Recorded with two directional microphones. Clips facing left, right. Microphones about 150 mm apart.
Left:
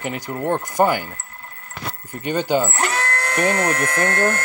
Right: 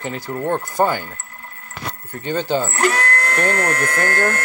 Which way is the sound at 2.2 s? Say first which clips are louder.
Left 1 dB; 15° left (ahead or behind).